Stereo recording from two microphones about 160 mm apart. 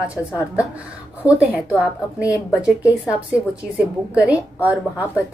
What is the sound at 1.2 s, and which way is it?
A woman's voice, 10° right (ahead or behind).